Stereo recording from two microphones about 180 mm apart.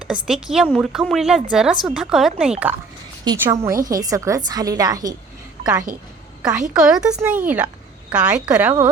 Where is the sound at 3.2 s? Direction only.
20° right (ahead or behind).